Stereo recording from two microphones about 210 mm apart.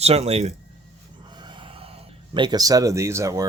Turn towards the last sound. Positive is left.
turn(degrees=-15)  # may be behind; listen again after turning